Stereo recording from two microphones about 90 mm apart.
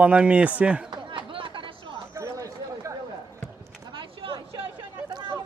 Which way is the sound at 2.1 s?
40° right (ahead or behind).